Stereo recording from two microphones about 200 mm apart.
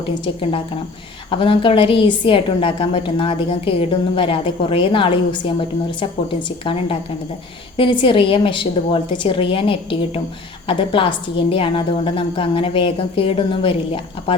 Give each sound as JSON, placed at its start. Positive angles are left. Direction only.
{"t": 1.3, "sound": "a woman's voice", "side_deg": 25}